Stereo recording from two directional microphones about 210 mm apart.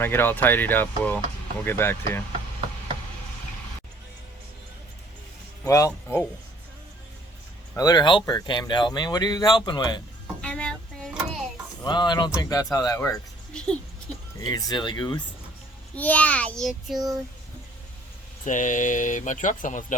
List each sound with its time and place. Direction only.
0.0 s speech: 10° left (ahead or behind)
5.6 s speech: 15° left (ahead or behind)
7.8 s speech: 20° left (ahead or behind)
10.4 s a sound: 5° left (ahead or behind)
11.8 s speech: 20° left (ahead or behind)
13.5 s a sound: 5° left (ahead or behind)
14.4 s speech: 20° left (ahead or behind)
16.0 s speech: 5° left (ahead or behind)
18.4 s speech: 35° left (ahead or behind)